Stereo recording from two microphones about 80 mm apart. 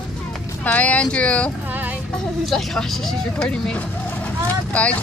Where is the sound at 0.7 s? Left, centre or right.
Centre.